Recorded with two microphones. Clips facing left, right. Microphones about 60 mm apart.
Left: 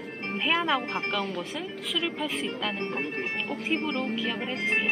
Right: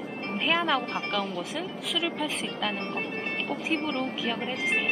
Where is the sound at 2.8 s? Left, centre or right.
Left.